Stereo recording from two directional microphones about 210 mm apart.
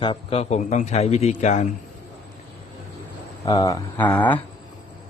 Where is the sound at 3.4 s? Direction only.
20° left (ahead or behind).